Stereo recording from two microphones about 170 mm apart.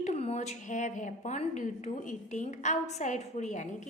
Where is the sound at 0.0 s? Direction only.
40° left (ahead or behind).